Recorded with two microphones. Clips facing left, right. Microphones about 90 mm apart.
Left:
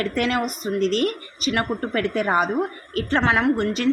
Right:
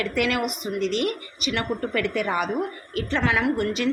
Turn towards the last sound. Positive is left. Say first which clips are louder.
# left 3 dB
turn(degrees=35)  # may be behind; listen again after turning